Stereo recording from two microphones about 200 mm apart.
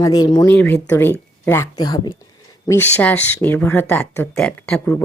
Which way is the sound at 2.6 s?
10° left (ahead or behind).